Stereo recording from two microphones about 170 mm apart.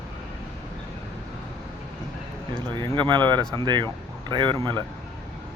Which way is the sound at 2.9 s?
25° right (ahead or behind).